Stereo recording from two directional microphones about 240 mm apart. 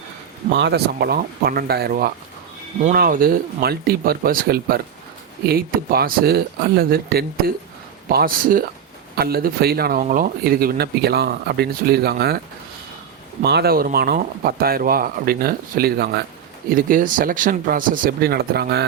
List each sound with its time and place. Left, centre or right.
0.5 s speech: right
13.4 s speech: right